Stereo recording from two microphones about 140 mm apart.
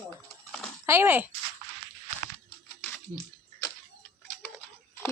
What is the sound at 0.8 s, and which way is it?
Speech, 15° right (ahead or behind).